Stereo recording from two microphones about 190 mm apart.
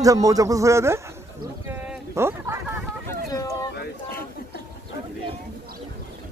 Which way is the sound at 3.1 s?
20° left (ahead or behind).